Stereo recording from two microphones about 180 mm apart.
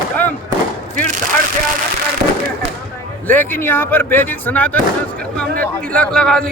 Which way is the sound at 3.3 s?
10° left (ahead or behind).